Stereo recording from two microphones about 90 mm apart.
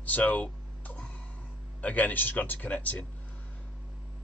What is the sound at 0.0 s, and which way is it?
Music, 15° left (ahead or behind).